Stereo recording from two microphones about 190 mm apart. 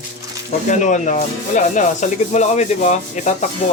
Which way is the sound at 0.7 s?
40° left (ahead or behind).